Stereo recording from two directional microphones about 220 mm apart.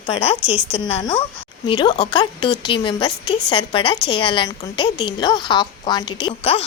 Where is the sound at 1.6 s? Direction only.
20° left (ahead or behind).